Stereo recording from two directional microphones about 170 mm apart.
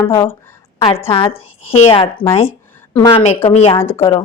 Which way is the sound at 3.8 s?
15° left (ahead or behind).